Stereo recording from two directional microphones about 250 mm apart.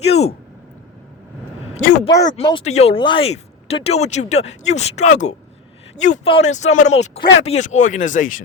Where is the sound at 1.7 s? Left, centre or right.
Left.